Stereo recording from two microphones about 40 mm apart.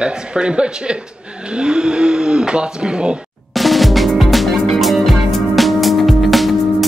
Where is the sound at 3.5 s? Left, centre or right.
Centre.